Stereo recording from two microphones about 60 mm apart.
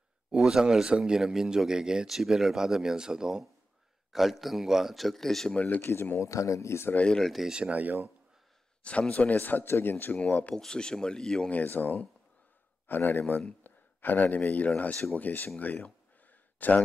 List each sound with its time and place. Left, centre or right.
0.4 s speech: centre
5.8 s speech: left
7.1 s speech: centre
7.4 s speech: centre
7.8 s speech: right
9.1 s speech: left
10.1 s speech: left
10.5 s speech: centre
11.5 s speech: left
15.6 s a sound: left